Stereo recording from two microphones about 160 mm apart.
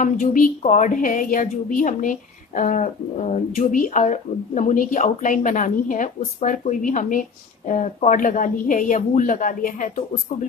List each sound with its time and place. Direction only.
0.0 s a woman's voice: 55° left (ahead or behind)